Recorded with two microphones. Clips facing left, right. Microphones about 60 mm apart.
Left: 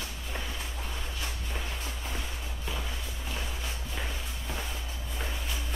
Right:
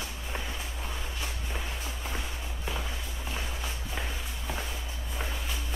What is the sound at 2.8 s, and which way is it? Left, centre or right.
Walk, centre.